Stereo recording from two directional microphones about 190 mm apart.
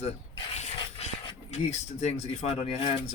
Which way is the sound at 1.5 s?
35° left (ahead or behind).